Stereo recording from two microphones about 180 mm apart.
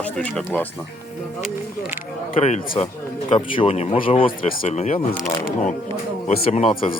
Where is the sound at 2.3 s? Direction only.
35° left (ahead or behind).